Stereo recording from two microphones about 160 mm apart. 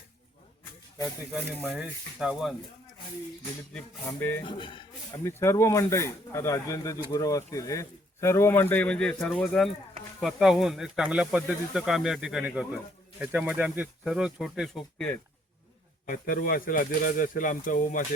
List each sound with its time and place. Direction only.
1.7 s speech: 5° right (ahead or behind)
3.7 s speech: 10° left (ahead or behind)
4.4 s speech: 30° left (ahead or behind)
5.2 s speech: 15° left (ahead or behind)
16.0 s speech: 60° left (ahead or behind)